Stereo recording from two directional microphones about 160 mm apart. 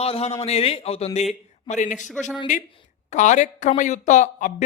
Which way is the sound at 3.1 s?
50° left (ahead or behind).